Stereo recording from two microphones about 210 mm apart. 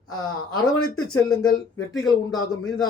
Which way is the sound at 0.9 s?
85° left.